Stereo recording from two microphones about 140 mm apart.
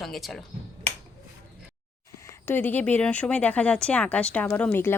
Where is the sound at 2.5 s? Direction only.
15° left (ahead or behind).